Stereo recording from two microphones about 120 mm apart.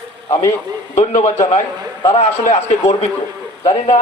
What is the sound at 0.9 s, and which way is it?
Speech, 80° left.